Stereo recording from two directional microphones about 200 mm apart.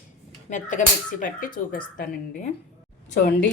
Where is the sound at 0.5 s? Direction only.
40° left (ahead or behind).